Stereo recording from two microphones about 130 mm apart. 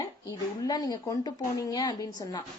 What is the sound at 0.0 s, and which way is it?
A woman's voice, 25° left (ahead or behind).